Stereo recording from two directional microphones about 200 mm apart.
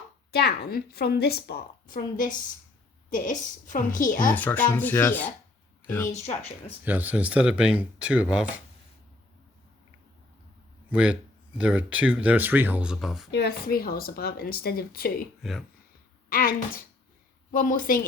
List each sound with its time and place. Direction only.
0.3 s a woman's voice: 50° left (ahead or behind)
4.4 s speech: 10° left (ahead or behind)
6.8 s speech: 10° right (ahead or behind)
10.8 s speech: 5° right (ahead or behind)
13.3 s speech: 50° left (ahead or behind)
15.4 s speech: centre (ahead or behind)
16.3 s speech: 45° left (ahead or behind)